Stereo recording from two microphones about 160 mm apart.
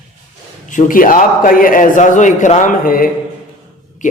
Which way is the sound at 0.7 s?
55° left (ahead or behind).